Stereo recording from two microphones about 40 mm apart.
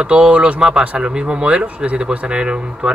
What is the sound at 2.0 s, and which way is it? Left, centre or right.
Speech, right.